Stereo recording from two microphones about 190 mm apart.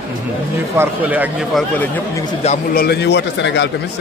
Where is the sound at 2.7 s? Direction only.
55° left (ahead or behind).